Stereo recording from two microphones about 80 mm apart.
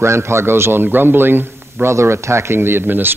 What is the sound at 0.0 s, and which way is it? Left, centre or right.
A man's voice, right.